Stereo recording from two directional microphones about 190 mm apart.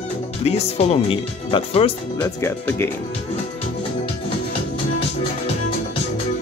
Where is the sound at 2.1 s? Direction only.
10° left (ahead or behind).